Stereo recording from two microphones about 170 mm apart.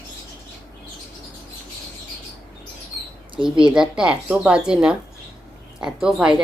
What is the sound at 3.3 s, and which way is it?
Speech, 30° right (ahead or behind).